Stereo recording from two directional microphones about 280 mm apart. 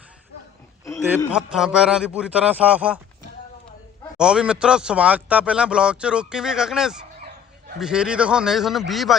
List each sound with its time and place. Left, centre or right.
1.3 s speech: centre
4.2 s speech: centre